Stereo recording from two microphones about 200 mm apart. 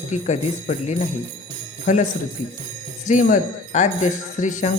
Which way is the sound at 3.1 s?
40° left (ahead or behind).